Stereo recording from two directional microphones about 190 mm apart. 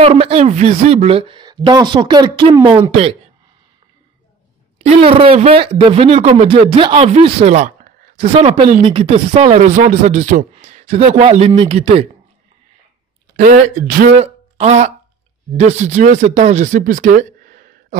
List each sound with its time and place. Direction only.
0.0 s speech: 30° right (ahead or behind)
4.7 s speech: 35° right (ahead or behind)
13.5 s speech: 45° right (ahead or behind)
14.2 s a sound: 35° right (ahead or behind)
15.5 s speech: 35° right (ahead or behind)